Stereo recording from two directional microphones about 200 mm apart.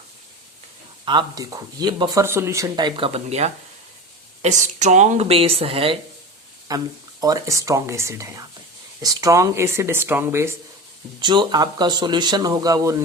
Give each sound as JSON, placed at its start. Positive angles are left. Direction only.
{"t": 1.0, "sound": "speech", "side_deg": -20}
{"t": 11.2, "sound": "speech", "side_deg": -20}